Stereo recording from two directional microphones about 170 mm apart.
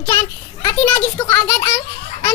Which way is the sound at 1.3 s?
15° left (ahead or behind).